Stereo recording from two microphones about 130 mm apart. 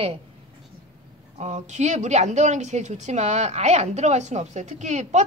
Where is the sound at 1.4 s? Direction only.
65° right (ahead or behind).